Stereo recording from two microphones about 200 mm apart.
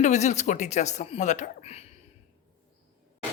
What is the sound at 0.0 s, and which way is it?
Speech, 35° left (ahead or behind).